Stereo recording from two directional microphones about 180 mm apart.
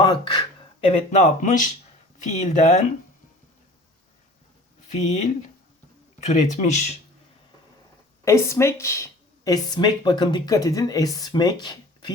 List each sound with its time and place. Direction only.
0.0 s a sound: 25° left (ahead or behind)
0.9 s speech: 40° left (ahead or behind)
4.9 s speech: 40° left (ahead or behind)
8.2 s speech: 15° left (ahead or behind)